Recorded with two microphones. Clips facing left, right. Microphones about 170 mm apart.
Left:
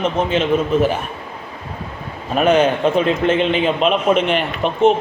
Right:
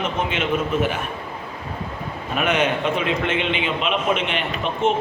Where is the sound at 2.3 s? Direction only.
35° left (ahead or behind).